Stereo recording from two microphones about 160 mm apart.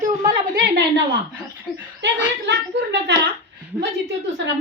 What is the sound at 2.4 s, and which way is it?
A woman's voice, 90° right.